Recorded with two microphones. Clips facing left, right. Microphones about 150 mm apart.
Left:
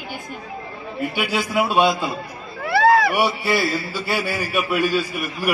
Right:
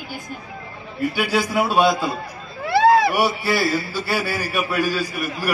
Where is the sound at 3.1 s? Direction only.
40° right (ahead or behind).